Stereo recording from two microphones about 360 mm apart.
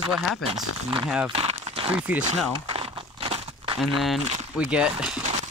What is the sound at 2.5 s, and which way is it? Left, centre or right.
Crumpling, centre.